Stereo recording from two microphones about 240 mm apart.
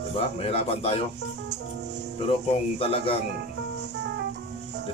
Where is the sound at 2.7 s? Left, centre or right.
Left.